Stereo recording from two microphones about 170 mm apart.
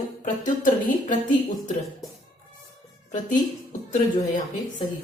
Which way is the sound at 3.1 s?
50° left (ahead or behind).